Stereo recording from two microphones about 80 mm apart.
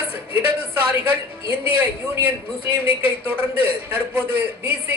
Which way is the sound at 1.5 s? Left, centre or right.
Right.